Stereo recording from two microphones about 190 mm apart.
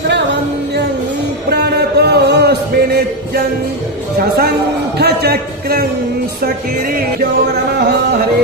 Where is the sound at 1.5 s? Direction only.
60° right (ahead or behind).